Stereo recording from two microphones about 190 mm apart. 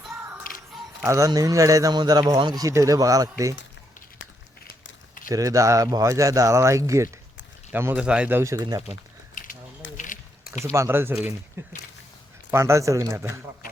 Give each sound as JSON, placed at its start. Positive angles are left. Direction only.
{"t": 1.0, "sound": "speech", "side_deg": -15}
{"t": 5.3, "sound": "speech", "side_deg": -20}
{"t": 9.4, "sound": "a sound", "side_deg": 45}
{"t": 10.6, "sound": "speech", "side_deg": -15}